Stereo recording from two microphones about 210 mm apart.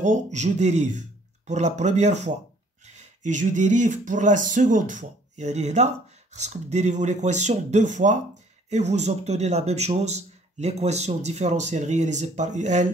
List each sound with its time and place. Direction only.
0.0 s speech: 35° right (ahead or behind)